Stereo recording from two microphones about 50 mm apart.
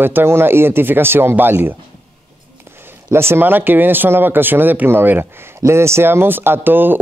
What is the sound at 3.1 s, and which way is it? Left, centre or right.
Speech, right.